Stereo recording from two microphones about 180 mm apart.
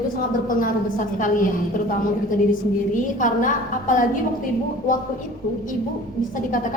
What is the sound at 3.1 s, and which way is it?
Speech, 45° left (ahead or behind).